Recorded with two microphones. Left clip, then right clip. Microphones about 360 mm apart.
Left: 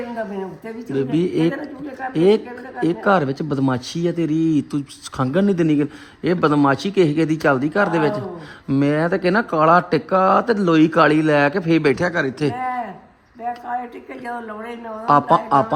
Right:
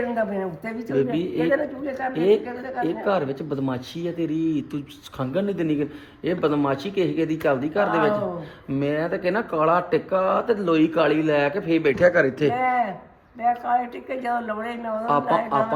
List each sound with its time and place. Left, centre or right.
0.9 s speech: left
14.1 s a woman's voice: centre
15.0 s speech: left